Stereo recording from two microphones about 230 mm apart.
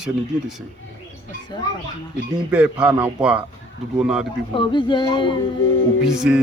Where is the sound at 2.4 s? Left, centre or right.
Centre.